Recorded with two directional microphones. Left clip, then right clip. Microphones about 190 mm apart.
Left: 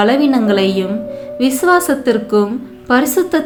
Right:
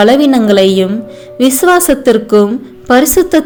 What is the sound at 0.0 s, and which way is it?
A woman's voice, 40° right (ahead or behind).